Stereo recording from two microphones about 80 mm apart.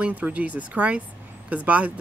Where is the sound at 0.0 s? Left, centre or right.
Centre.